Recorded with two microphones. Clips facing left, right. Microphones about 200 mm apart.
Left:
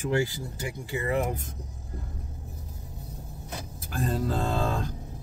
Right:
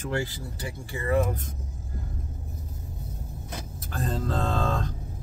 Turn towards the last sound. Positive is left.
turn(degrees=10)  # may be behind; listen again after turning